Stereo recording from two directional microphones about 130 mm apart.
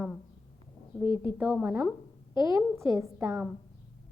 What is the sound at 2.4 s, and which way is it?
Speech, 25° right (ahead or behind).